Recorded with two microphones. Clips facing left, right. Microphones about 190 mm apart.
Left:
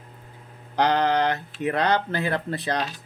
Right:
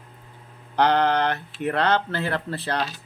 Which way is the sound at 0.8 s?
60° right (ahead or behind).